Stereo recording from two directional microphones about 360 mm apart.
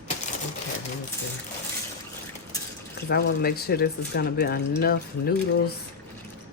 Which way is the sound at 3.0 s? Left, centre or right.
Left.